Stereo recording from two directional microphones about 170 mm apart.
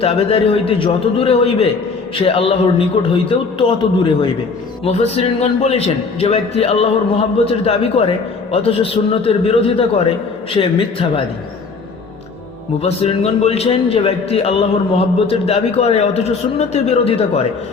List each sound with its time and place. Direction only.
0.0 s a man's voice: 35° left (ahead or behind)
12.8 s a man's voice: 35° left (ahead or behind)